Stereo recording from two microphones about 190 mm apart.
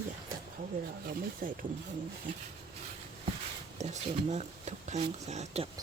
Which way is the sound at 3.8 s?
35° right (ahead or behind).